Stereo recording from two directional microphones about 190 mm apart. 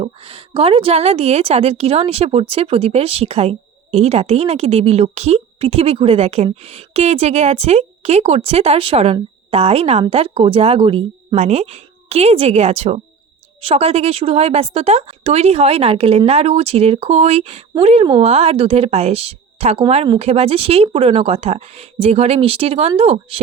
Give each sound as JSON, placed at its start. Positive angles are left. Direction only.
{"t": 0.0, "sound": "a woman's voice", "side_deg": -30}